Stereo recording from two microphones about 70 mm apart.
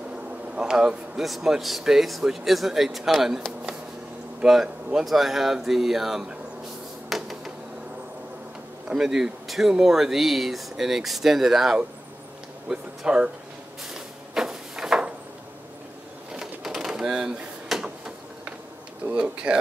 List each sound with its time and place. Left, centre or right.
0.1 s a man's voice: centre
7.1 s a sound: centre
8.8 s a man's voice: centre
13.9 s drawer open or close: centre
16.3 s a sound: centre
19.0 s speech: centre